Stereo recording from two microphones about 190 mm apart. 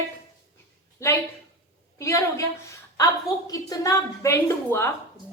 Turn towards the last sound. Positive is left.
turn(degrees=15)  # may be behind; listen again after turning